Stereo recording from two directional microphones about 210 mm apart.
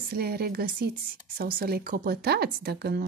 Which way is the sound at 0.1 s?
45° right (ahead or behind).